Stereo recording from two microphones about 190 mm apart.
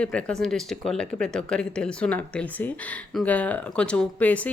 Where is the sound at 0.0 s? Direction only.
5° left (ahead or behind).